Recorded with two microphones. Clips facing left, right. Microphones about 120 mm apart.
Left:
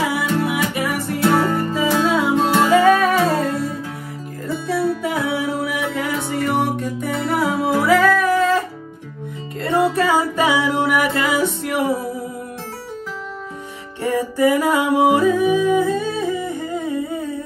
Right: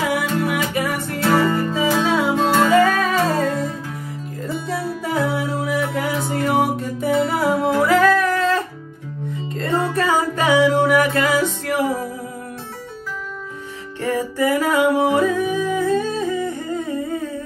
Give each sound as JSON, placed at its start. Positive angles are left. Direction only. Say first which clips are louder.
{"t": 0.7, "sound": "music", "louder": "left 1 dB", "side_deg": 0}
{"t": 9.8, "sound": "music", "louder": "left 3 dB", "side_deg": 10}
{"t": 14.0, "sound": "music", "louder": "left 3 dB", "side_deg": 15}